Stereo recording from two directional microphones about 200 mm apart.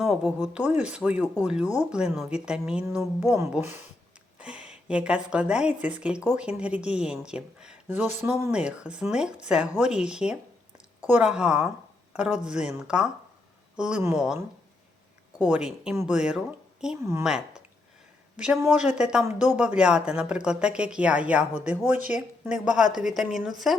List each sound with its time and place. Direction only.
0.0 s speech: 5° right (ahead or behind)
15.4 s speech: 5° right (ahead or behind)
19.3 s speech: 35° left (ahead or behind)
19.5 s speech: 5° right (ahead or behind)